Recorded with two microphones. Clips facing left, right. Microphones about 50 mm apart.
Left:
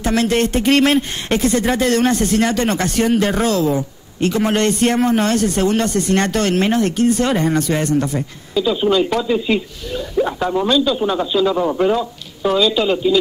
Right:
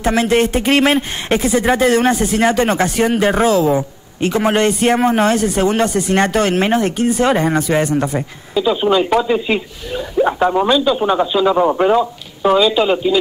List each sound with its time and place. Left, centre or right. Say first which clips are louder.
0.0 s a man's voice: right 2 dB; centre